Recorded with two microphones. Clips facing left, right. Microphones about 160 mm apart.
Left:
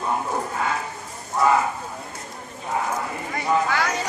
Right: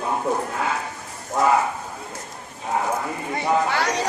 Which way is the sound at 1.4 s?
90° right.